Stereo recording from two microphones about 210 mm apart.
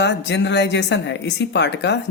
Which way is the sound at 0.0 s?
55° left (ahead or behind).